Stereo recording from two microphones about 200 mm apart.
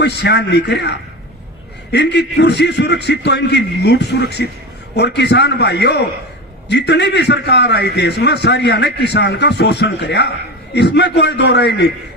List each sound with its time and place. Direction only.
0.0 s a man's voice: 55° left (ahead or behind)